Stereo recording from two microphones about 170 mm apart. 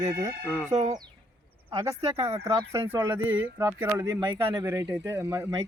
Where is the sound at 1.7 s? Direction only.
20° right (ahead or behind).